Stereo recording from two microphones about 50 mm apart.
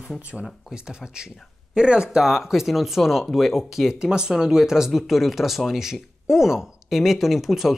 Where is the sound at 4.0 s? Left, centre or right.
Centre.